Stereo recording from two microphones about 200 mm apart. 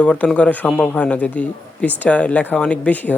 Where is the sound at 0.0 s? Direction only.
5° left (ahead or behind).